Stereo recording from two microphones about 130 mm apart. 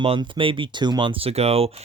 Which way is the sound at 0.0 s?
40° right (ahead or behind).